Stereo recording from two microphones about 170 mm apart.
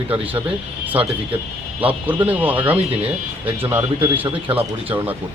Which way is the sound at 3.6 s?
10° right (ahead or behind).